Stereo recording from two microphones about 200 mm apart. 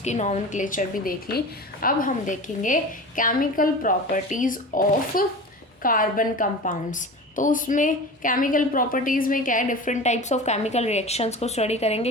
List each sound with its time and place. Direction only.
0.0 s a woman's voice: 35° left (ahead or behind)